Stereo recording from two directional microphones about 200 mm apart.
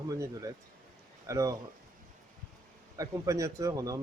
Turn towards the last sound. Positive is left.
turn(degrees=-15)  # may be behind; listen again after turning